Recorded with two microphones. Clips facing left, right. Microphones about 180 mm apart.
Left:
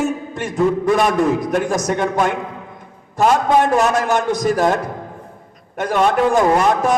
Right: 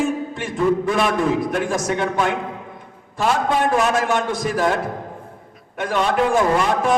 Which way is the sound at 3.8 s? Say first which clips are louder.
Left 2 dB; 40° left (ahead or behind).